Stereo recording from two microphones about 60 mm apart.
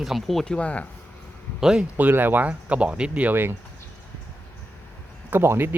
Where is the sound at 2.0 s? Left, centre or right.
Right.